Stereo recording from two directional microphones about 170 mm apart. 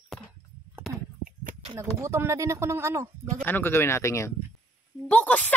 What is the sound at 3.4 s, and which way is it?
Speech, 10° left (ahead or behind).